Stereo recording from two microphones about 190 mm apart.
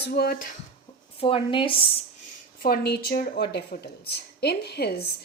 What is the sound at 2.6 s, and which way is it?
A woman's voice, 55° left (ahead or behind).